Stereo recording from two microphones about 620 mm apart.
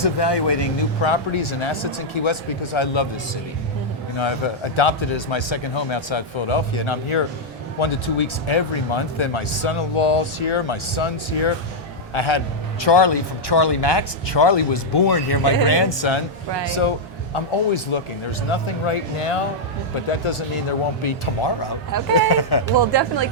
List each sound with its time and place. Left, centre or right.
0.0 s speech: left
4.2 s speech: left
17.3 s speech: left
21.9 s speech: right
22.3 s speech: left
22.8 s speech: right